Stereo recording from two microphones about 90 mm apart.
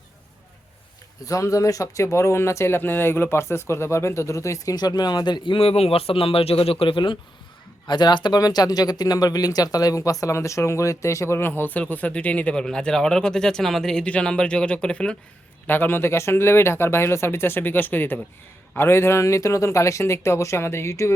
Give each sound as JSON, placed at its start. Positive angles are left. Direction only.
{"t": 1.2, "sound": "speech", "side_deg": 40}
{"t": 5.5, "sound": "speech", "side_deg": 90}
{"t": 7.9, "sound": "speech", "side_deg": 55}
{"t": 15.6, "sound": "speech", "side_deg": 20}